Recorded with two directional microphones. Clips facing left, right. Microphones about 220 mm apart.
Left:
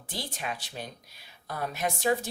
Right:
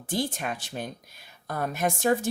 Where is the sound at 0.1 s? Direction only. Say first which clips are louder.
Right 7 dB; 50° right (ahead or behind).